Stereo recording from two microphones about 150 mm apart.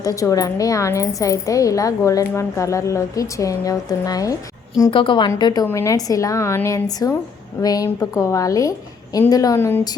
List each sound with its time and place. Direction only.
0.0 s a woman's voice: 25° left (ahead or behind)
4.9 s a woman's voice: 35° left (ahead or behind); by 9.8 s 15° left (ahead or behind)